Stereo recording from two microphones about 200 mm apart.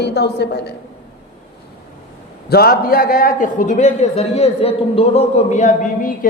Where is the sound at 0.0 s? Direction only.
55° left (ahead or behind).